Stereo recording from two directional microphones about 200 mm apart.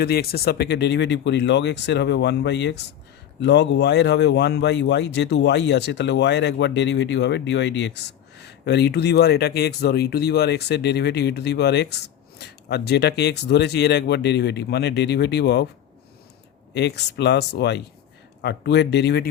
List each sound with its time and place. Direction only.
0.0 s speech: 50° left (ahead or behind)
16.7 s speech: 55° left (ahead or behind)